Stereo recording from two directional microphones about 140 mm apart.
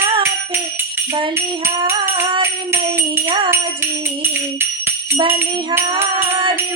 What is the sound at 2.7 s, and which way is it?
Jingle bell, 15° right (ahead or behind).